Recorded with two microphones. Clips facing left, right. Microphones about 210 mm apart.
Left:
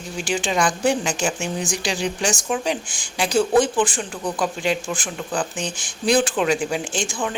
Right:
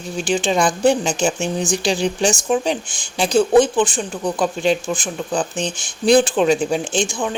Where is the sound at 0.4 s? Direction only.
25° right (ahead or behind).